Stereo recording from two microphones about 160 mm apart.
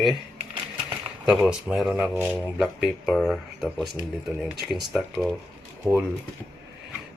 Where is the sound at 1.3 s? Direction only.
5° right (ahead or behind).